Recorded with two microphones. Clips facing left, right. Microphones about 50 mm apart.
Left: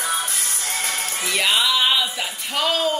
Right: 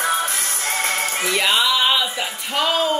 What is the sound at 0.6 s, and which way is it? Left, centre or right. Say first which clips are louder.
Music: right 5 dB; right.